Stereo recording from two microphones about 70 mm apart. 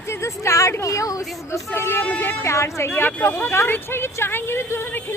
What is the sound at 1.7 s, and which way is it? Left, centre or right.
A woman's voice, left.